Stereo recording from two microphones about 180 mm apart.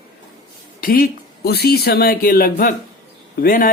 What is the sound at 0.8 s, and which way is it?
Speech, 50° left (ahead or behind).